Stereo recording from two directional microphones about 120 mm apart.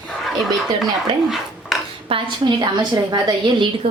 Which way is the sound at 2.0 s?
50° right (ahead or behind).